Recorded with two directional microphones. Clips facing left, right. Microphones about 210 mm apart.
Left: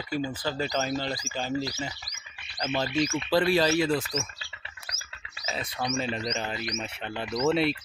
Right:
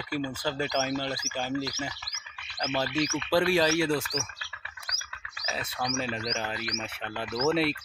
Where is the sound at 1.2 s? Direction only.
10° right (ahead or behind).